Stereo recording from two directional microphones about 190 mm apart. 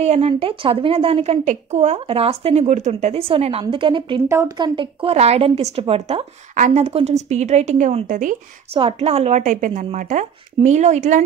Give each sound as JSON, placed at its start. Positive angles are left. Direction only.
{"t": 0.0, "sound": "a woman's voice", "side_deg": -35}
{"t": 8.7, "sound": "speech", "side_deg": -30}